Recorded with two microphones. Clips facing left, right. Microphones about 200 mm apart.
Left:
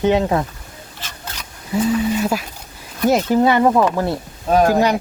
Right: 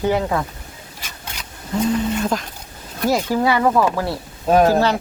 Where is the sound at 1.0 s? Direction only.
10° right (ahead or behind).